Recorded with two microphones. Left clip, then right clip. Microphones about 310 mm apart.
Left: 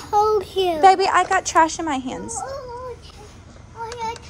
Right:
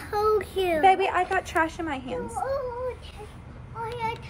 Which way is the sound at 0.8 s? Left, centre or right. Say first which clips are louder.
Left 6 dB; left.